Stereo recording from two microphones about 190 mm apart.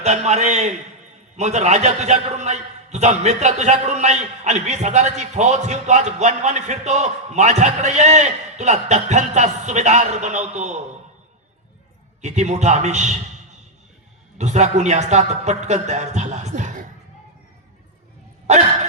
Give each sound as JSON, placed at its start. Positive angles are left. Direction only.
{"t": 0.0, "sound": "a man's voice", "side_deg": -35}
{"t": 12.2, "sound": "a man's voice", "side_deg": -35}
{"t": 14.3, "sound": "a man's voice", "side_deg": -35}
{"t": 18.4, "sound": "a sound", "side_deg": -35}